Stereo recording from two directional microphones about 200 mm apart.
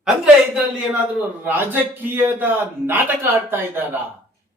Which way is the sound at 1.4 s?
10° right (ahead or behind).